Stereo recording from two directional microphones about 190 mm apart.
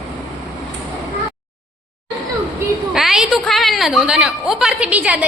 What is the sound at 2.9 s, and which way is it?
A woman's voice, 5° right (ahead or behind).